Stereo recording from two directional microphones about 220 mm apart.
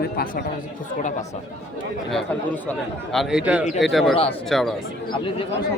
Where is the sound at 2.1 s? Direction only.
5° left (ahead or behind).